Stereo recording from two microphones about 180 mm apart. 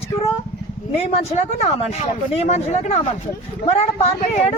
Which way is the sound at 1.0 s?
35° left (ahead or behind).